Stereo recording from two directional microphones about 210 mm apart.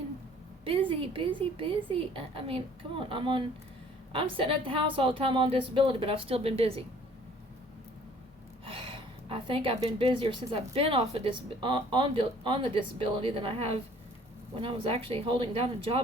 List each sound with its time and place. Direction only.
0.6 s a woman's voice: 25° right (ahead or behind)
8.6 s a woman's voice: 25° right (ahead or behind)